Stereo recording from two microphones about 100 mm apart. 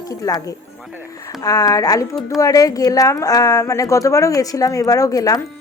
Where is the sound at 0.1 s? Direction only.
40° left (ahead or behind).